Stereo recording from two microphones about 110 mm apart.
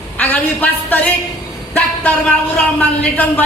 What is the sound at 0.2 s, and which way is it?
Speech, 15° left (ahead or behind).